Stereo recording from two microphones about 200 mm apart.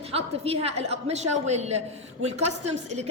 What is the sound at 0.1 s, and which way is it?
A woman's voice, 30° right (ahead or behind).